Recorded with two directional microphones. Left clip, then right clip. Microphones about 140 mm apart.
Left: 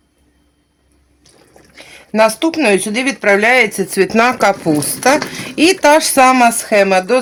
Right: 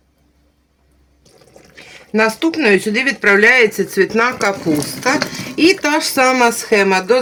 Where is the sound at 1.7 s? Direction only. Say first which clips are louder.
Left 1 dB; 20° left (ahead or behind).